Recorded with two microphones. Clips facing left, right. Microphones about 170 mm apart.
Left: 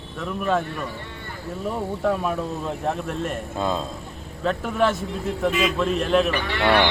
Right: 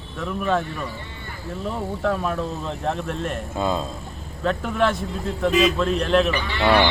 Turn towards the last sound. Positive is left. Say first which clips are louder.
# even
turn(degrees=65)  # may be behind; listen again after turning